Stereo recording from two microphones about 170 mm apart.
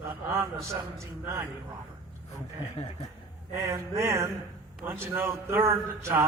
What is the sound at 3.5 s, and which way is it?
A man's voice, 15° right (ahead or behind).